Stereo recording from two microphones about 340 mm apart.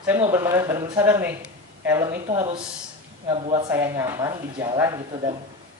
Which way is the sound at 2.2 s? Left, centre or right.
Centre.